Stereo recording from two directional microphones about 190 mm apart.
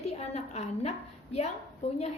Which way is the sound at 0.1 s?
35° left (ahead or behind).